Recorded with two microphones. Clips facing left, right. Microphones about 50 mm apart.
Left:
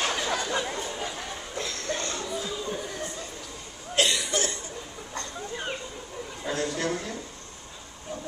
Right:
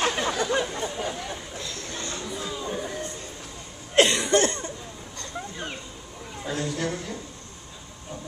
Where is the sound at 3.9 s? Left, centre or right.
Right.